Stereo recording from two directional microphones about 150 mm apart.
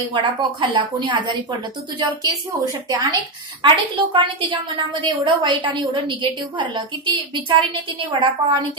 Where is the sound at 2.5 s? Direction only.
20° right (ahead or behind).